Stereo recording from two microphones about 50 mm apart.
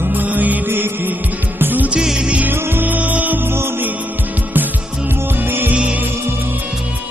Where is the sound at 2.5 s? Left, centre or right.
Right.